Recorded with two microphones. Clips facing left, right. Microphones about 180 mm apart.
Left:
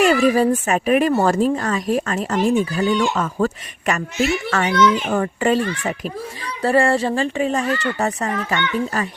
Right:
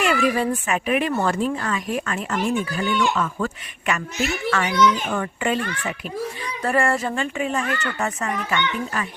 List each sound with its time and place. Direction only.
0.0 s speech: 40° left (ahead or behind)